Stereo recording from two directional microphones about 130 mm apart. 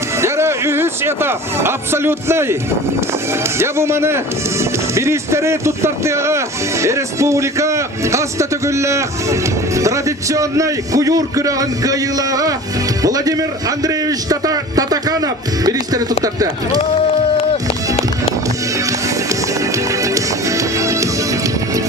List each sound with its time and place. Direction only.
0.2 s speech: 20° right (ahead or behind)
3.6 s a man's voice: 20° right (ahead or behind)
17.3 s music: 45° left (ahead or behind)
18.9 s music: 25° right (ahead or behind)